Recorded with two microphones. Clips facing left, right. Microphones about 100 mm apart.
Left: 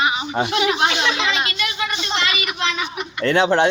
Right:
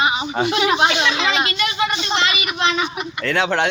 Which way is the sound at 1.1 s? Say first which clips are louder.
Right 2 dB; 40° right (ahead or behind).